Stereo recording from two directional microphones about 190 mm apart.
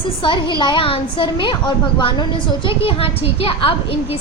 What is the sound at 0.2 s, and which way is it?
A woman's voice, 25° left (ahead or behind).